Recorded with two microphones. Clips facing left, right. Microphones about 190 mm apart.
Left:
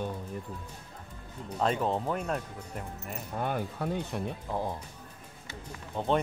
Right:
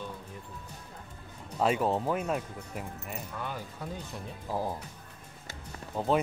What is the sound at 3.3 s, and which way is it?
Speech, 55° left (ahead or behind).